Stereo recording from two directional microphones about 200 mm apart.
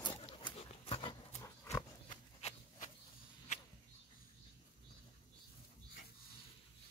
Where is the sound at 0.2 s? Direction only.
25° left (ahead or behind).